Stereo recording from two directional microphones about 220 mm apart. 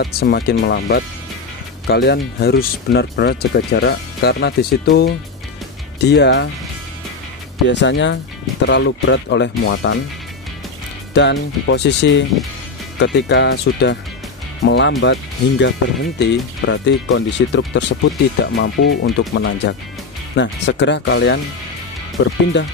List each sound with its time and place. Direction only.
0.0 s speech: 45° left (ahead or behind)
7.6 s speech: 55° left (ahead or behind)
11.1 s speech: 50° left (ahead or behind)